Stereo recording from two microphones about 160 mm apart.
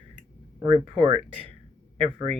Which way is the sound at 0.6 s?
35° right (ahead or behind).